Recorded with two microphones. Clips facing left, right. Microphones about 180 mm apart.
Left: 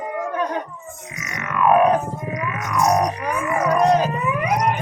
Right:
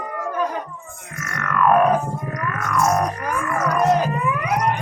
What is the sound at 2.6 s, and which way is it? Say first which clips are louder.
Music: left 1 dB; 15° left (ahead or behind).